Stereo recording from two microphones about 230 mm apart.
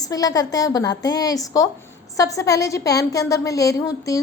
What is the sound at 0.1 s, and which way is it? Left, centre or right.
A woman's voice, centre.